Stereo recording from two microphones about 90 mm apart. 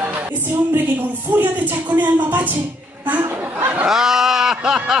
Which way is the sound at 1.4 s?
20° right (ahead or behind).